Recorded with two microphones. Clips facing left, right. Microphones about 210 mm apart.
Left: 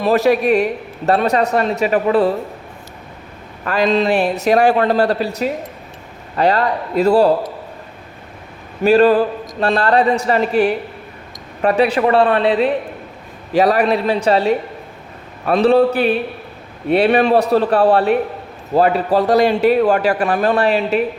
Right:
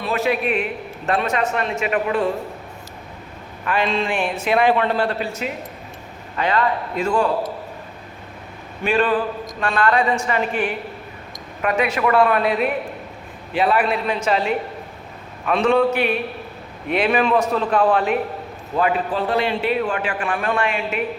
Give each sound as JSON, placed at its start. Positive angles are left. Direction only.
{"t": 0.0, "sound": "a man's voice", "side_deg": 40}
{"t": 3.7, "sound": "a man's voice", "side_deg": 40}
{"t": 8.8, "sound": "a man's voice", "side_deg": 40}